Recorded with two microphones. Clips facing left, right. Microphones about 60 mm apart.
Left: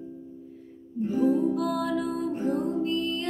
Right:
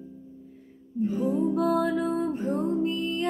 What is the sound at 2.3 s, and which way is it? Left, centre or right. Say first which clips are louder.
Music: left 1 dB; centre.